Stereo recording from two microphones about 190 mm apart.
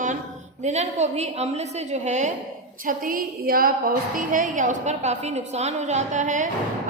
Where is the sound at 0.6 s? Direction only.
35° right (ahead or behind).